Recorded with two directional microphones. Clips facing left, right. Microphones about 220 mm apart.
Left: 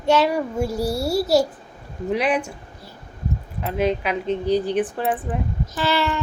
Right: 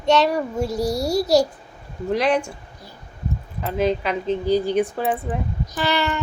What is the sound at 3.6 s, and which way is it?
Child singing, 5° left (ahead or behind).